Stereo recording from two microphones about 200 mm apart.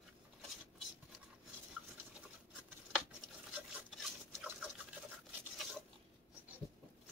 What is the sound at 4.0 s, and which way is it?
Chicken, centre (ahead or behind).